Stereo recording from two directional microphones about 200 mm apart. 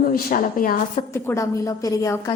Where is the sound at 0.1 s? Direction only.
45° left (ahead or behind).